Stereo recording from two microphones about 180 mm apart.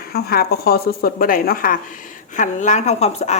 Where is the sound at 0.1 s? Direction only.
60° left (ahead or behind).